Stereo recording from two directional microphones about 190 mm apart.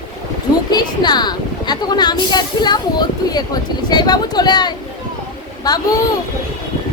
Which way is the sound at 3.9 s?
20° left (ahead or behind).